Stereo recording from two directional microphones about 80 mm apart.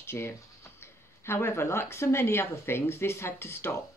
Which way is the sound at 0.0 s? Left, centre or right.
Left.